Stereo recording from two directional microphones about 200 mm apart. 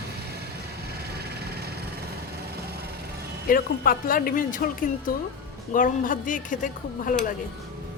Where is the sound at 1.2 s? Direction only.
50° right (ahead or behind).